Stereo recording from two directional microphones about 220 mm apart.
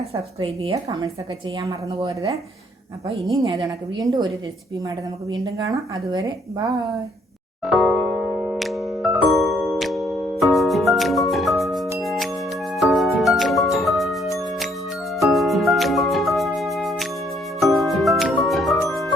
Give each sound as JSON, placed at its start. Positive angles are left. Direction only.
{"t": 0.1, "sound": "a woman's voice", "side_deg": -25}
{"t": 3.4, "sound": "a woman's voice", "side_deg": -25}
{"t": 5.6, "sound": "speech", "side_deg": -15}
{"t": 7.6, "sound": "music", "side_deg": 0}